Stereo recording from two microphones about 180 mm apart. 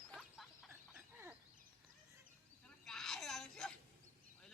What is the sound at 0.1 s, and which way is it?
Duck, 5° left (ahead or behind).